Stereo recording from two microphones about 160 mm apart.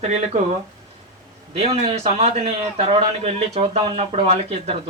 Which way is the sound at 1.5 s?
40° right (ahead or behind).